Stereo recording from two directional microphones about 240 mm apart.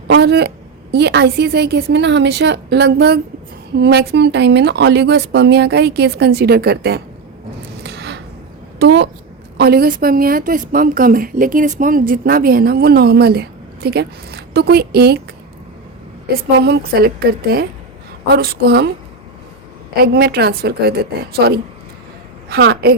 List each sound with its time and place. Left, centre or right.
0.1 s speech: right
7.9 s a sound: right
8.8 s a woman's voice: right
16.6 s a woman's voice: right
20.0 s a woman's voice: right